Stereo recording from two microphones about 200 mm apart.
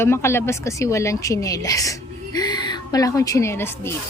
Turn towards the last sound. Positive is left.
turn(degrees=10)  # may be behind; listen again after turning